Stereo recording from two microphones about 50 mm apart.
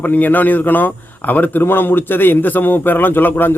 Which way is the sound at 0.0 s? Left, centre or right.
Left.